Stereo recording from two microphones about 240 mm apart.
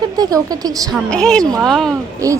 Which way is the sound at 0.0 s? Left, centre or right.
Centre.